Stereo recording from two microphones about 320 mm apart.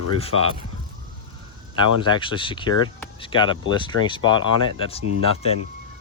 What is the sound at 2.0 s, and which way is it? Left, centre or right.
Speech, centre.